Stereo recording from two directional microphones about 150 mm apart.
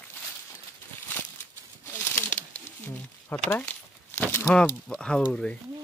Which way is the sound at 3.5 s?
10° left (ahead or behind).